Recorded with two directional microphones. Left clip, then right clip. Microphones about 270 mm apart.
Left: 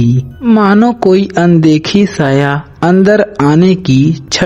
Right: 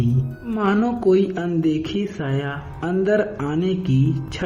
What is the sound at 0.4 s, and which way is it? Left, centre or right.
A man's voice, left.